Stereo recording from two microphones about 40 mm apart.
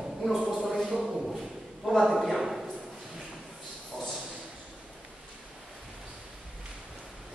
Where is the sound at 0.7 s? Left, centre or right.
Centre.